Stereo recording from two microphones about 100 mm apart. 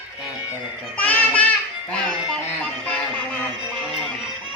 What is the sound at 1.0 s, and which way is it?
Child singing, 15° left (ahead or behind).